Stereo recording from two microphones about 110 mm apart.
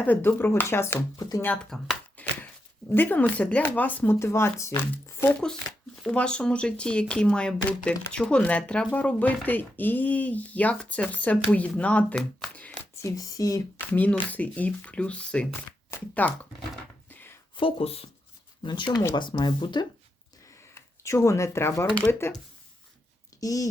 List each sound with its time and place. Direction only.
0.0 s speech: 15° left (ahead or behind)
1.1 s speech: 35° left (ahead or behind)
1.7 s a sound: 15° left (ahead or behind)
2.9 s speech: 15° left (ahead or behind)
5.4 s speech: 5° left (ahead or behind)
13.0 s speech: 30° left (ahead or behind)
13.9 s speech: 15° left (ahead or behind)
17.1 s a sound: 20° left (ahead or behind)
17.6 s speech: 55° left (ahead or behind)
18.6 s speech: 45° left (ahead or behind)
20.7 s speech: 25° left (ahead or behind)
23.4 s speech: 30° left (ahead or behind)